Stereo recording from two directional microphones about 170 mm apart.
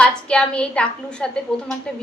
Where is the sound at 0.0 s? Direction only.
5° left (ahead or behind).